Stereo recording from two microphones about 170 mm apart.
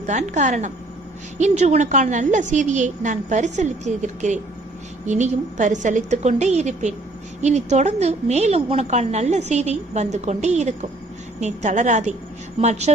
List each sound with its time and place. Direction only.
0.0 s a woman's voice: 45° right (ahead or behind)